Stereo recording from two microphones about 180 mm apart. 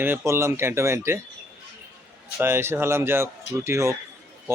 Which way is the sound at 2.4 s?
15° right (ahead or behind).